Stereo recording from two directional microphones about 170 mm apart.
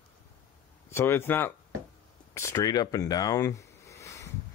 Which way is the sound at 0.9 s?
15° left (ahead or behind).